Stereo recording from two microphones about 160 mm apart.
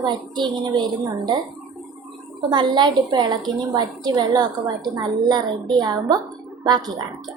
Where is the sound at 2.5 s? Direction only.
30° right (ahead or behind).